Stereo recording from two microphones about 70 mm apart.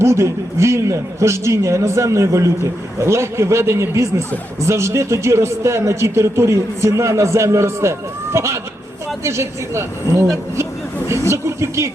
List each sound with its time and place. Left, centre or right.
0.0 s a man's voice: right